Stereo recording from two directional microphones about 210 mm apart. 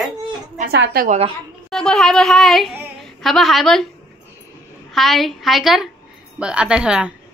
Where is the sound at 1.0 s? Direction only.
30° right (ahead or behind).